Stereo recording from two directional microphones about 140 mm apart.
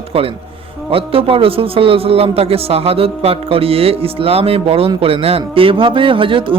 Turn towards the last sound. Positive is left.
turn(degrees=-35)  # may be behind; listen again after turning